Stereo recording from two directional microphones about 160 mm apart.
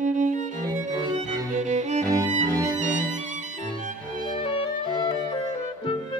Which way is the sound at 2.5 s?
20° right (ahead or behind).